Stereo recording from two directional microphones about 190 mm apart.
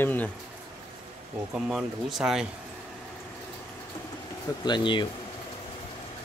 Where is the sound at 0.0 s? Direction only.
10° left (ahead or behind).